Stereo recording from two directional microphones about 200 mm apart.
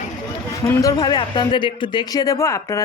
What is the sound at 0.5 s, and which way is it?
A man's voice, 15° left (ahead or behind).